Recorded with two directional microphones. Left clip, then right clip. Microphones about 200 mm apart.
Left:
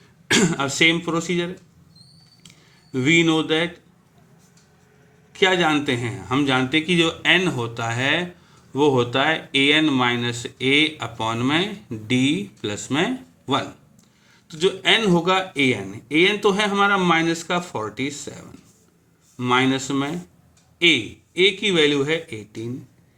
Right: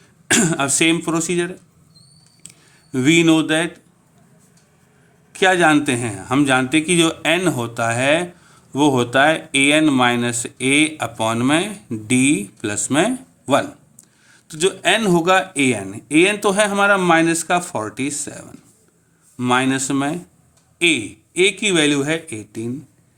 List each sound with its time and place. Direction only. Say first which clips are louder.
0.3 s a man's voice: right 2 dB; 50° right (ahead or behind)
2.4 s a sound: right 6 dB; 55° right (ahead or behind)
5.3 s a man's voice: right 4 dB; 50° right (ahead or behind)